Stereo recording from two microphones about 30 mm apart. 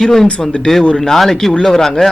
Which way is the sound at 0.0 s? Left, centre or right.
Centre.